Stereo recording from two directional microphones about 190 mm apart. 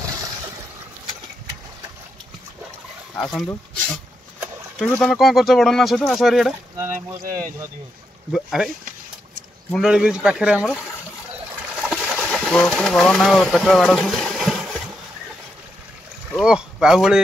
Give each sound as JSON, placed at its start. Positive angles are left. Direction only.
{"t": 3.4, "sound": "speech", "side_deg": 5}
{"t": 6.8, "sound": "speech", "side_deg": -15}
{"t": 8.3, "sound": "speech", "side_deg": 0}
{"t": 11.7, "sound": "bird", "side_deg": 5}
{"t": 16.3, "sound": "speech", "side_deg": -5}